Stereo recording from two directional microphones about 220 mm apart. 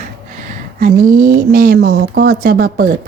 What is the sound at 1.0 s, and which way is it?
Speech, 40° right (ahead or behind).